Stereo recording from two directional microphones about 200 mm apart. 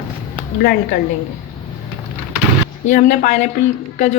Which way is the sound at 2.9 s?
40° left (ahead or behind).